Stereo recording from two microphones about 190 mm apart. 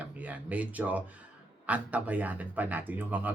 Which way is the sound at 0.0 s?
10° right (ahead or behind).